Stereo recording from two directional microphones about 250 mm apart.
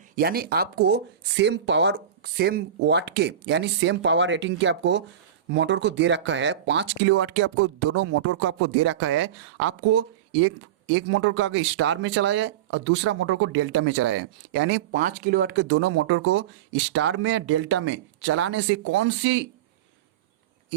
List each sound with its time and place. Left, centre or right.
0.2 s speech: right
14.9 s speech: right
15.7 s speech: right